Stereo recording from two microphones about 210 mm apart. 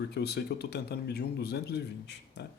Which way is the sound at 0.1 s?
50° left (ahead or behind).